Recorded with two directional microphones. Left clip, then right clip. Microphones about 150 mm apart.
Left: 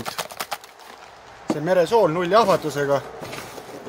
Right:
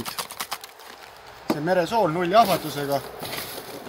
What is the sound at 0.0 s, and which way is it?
Clip-clop, 45° left (ahead or behind).